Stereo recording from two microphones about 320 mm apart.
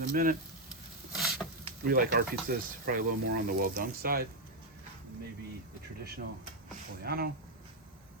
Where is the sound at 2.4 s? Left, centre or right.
Right.